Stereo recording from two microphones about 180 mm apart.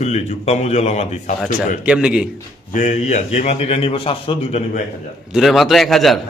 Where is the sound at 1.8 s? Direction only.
5° right (ahead or behind).